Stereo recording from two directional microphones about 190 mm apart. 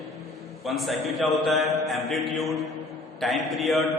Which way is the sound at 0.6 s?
Centre (ahead or behind).